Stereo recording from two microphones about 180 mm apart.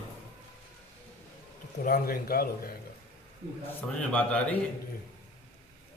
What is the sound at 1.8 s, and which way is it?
Speech, 55° left (ahead or behind).